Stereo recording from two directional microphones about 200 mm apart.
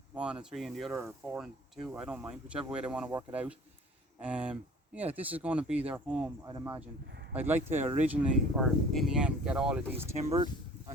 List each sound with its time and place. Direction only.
0.1 s speech: 5° right (ahead or behind)
0.9 s speech: 10° right (ahead or behind)
10.2 s a sound: 30° right (ahead or behind)